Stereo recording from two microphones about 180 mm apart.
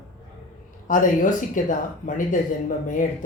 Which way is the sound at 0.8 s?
45° left (ahead or behind).